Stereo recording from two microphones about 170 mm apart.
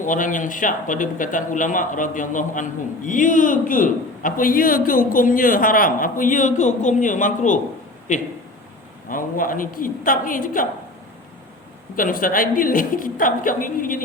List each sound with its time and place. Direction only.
0.0 s a man's voice: 50° left (ahead or behind)
9.0 s a woman's voice: 55° left (ahead or behind)
11.9 s a man's voice: 55° left (ahead or behind)